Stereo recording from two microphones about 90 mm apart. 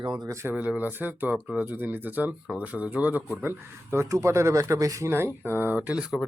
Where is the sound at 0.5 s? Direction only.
15° right (ahead or behind); by 5.1 s 40° right (ahead or behind).